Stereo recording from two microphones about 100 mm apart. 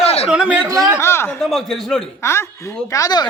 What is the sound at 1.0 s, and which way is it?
Speech, 25° left (ahead or behind).